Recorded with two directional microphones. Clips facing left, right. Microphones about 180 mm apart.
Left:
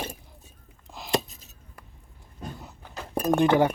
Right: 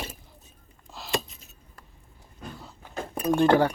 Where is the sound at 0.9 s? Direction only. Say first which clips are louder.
Left 3 dB; 15° left (ahead or behind).